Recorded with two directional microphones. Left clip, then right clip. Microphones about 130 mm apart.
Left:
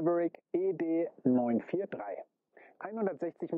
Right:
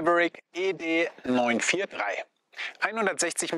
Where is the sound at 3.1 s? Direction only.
55° left (ahead or behind).